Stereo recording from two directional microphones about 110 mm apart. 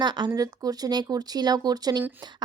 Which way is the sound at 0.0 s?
45° right (ahead or behind).